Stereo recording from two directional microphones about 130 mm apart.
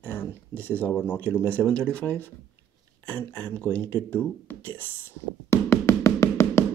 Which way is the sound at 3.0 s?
15° left (ahead or behind).